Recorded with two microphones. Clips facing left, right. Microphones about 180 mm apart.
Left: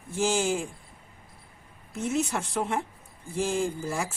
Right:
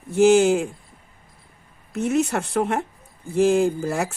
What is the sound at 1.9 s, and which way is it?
Speech, 65° right (ahead or behind).